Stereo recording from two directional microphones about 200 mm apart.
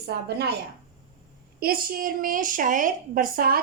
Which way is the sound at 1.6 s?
45° right (ahead or behind).